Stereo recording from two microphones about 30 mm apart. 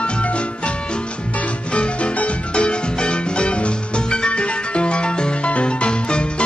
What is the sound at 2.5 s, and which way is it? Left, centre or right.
Music, left.